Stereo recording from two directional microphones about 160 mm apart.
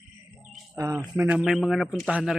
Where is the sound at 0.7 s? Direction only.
20° right (ahead or behind).